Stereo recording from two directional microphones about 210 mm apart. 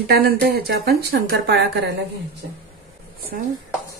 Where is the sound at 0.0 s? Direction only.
50° right (ahead or behind).